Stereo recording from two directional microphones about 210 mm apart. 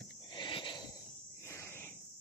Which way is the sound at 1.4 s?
15° left (ahead or behind).